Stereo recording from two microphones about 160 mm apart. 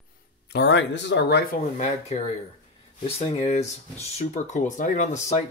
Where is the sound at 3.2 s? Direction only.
40° left (ahead or behind).